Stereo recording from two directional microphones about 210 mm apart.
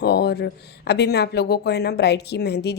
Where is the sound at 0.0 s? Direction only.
50° left (ahead or behind).